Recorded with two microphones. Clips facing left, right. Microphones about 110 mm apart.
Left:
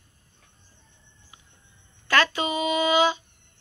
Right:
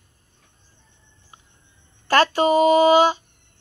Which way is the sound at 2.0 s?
40° right (ahead or behind).